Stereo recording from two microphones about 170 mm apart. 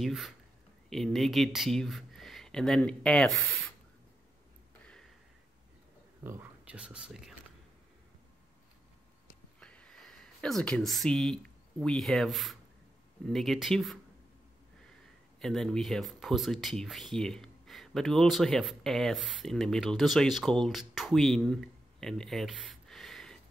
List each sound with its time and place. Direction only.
0.0 s speech: centre (ahead or behind)
4.8 s a sound: 5° left (ahead or behind)
6.2 s speech: 10° right (ahead or behind)
9.6 s a sound: 5° left (ahead or behind)
11.8 s speech: centre (ahead or behind)
15.4 s speech: 5° left (ahead or behind)